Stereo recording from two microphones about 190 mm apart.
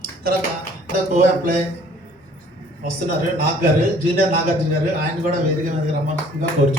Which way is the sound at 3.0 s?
50° right (ahead or behind).